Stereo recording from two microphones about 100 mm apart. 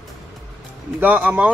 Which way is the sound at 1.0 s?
15° right (ahead or behind).